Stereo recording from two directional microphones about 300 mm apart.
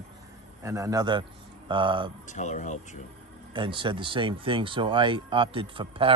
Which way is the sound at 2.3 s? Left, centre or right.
Left.